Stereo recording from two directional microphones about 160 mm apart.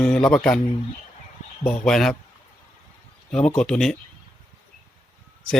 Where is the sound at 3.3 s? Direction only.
5° left (ahead or behind).